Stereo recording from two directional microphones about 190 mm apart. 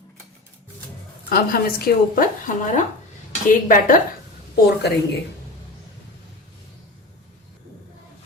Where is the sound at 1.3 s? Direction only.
55° left (ahead or behind).